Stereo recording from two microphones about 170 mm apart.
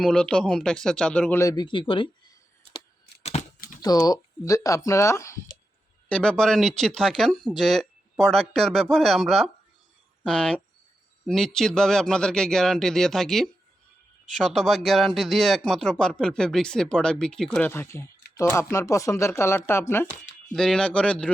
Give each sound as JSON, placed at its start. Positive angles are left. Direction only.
{"t": 0.0, "sound": "speech", "side_deg": 5}
{"t": 1.4, "sound": "speech", "side_deg": 20}
{"t": 3.8, "sound": "speech", "side_deg": 20}
{"t": 6.1, "sound": "speech", "side_deg": 5}
{"t": 17.7, "sound": "speech", "side_deg": 15}